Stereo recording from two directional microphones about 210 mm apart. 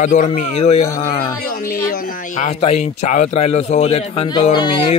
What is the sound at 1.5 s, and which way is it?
A man's voice, 40° left (ahead or behind).